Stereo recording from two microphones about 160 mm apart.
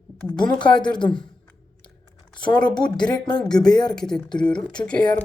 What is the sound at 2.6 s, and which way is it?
A woman's voice, 5° left (ahead or behind).